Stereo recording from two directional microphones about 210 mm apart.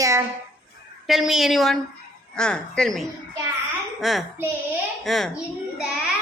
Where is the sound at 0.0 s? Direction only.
15° right (ahead or behind).